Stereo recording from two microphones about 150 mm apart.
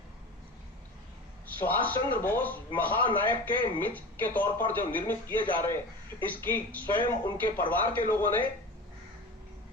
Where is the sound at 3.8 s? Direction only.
10° left (ahead or behind).